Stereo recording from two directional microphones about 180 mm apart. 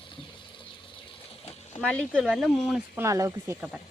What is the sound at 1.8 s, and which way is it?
Speech, 5° left (ahead or behind).